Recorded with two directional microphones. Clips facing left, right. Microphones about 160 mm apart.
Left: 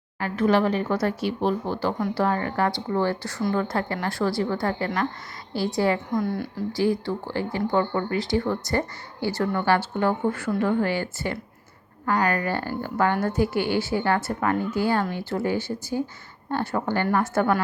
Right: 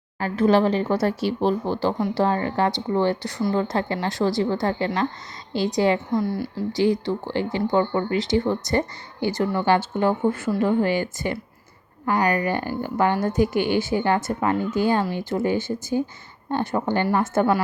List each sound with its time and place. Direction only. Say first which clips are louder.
0.2 s speech: right 3 dB; 30° right (ahead or behind)
6.1 s a woman's voice: right 2 dB; 5° right (ahead or behind)
6.7 s a woman's voice: right 3 dB; 20° right (ahead or behind)